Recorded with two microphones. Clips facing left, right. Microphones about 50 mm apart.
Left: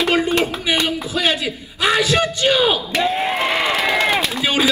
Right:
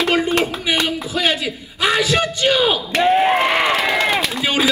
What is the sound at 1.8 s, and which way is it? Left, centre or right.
Speech, right.